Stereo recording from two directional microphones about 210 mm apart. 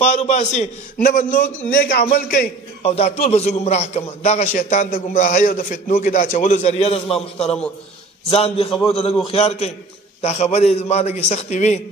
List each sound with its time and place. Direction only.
0.0 s a man's voice: 35° left (ahead or behind)
2.8 s a man's voice: 30° left (ahead or behind)